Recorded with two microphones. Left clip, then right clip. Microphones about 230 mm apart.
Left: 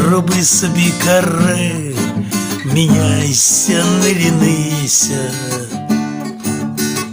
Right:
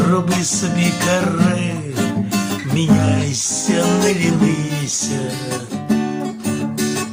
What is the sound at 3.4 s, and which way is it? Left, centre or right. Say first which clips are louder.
Music: left 8 dB; left.